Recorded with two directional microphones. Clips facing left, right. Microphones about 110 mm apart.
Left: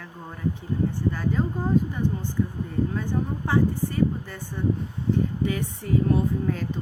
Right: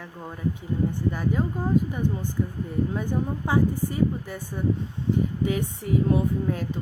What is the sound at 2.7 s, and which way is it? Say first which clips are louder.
Speech: even; 15° right (ahead or behind).